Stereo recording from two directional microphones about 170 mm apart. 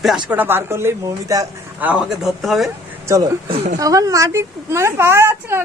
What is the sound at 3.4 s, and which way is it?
Speech, 35° right (ahead or behind).